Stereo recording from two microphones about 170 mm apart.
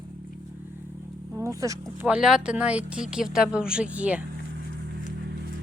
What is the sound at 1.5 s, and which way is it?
Speech, 20° right (ahead or behind).